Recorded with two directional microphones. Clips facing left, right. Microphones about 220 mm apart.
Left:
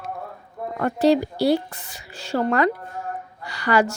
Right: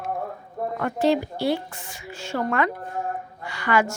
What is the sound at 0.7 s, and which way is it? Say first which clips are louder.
A woman's voice: left 4 dB; 35° left (ahead or behind).